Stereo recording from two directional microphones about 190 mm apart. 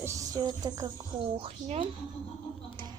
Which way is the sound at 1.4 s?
30° right (ahead or behind).